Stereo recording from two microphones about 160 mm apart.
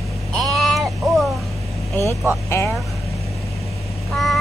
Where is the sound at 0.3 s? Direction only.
Centre (ahead or behind).